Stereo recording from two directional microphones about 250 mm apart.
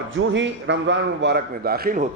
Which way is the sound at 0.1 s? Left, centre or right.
Right.